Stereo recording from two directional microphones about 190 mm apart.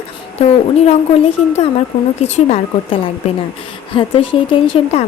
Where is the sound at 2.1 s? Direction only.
35° left (ahead or behind).